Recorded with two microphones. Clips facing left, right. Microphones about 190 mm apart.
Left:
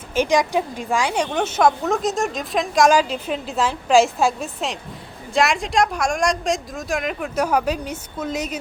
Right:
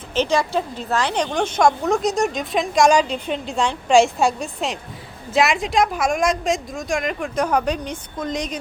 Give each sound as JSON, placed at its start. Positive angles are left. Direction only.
{"t": 0.1, "sound": "a woman's voice", "side_deg": 15}